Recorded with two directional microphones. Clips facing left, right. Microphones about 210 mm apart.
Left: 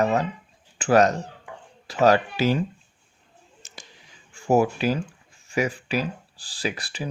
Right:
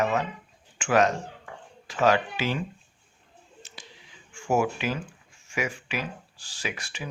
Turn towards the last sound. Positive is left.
turn(degrees=35)  # may be behind; listen again after turning